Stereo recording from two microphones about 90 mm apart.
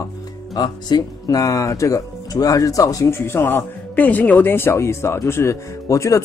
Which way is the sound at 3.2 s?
25° left (ahead or behind).